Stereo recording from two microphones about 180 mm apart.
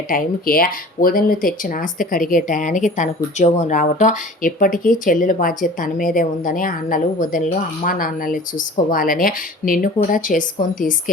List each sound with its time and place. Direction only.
0.1 s speech: 50° left (ahead or behind)